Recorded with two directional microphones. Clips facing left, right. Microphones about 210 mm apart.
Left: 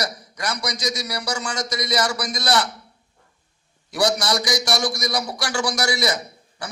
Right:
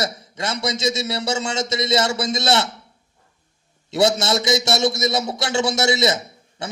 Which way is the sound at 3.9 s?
25° right (ahead or behind).